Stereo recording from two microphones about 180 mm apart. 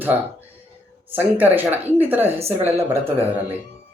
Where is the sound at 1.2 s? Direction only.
10° right (ahead or behind).